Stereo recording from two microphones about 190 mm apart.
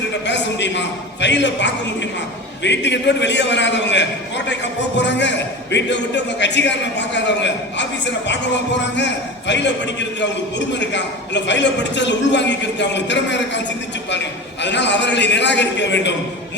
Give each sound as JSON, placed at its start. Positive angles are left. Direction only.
{"t": 0.3, "sound": "a man's voice", "side_deg": 70}
{"t": 14.6, "sound": "a man's voice", "side_deg": 65}